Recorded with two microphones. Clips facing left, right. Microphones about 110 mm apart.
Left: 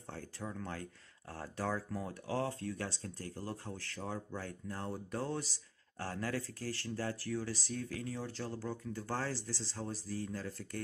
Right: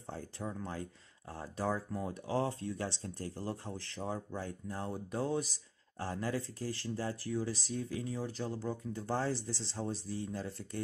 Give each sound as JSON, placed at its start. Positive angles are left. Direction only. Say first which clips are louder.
{"t": 0.0, "sound": "speech", "louder": "right 3 dB", "side_deg": -15}